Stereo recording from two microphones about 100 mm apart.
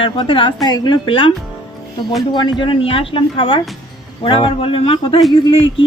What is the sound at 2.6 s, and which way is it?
Speech, 65° left (ahead or behind).